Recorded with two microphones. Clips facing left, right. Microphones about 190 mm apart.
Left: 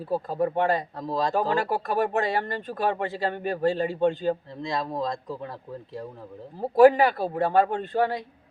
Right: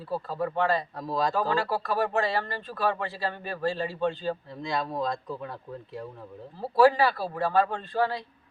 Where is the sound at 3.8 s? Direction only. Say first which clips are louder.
Left 5 dB; 50° left (ahead or behind).